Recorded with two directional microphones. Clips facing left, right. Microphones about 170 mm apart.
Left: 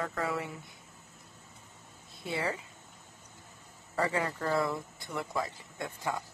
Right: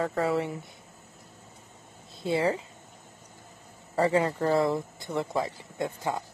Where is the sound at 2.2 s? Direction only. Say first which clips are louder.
Right 8 dB; 30° right (ahead or behind).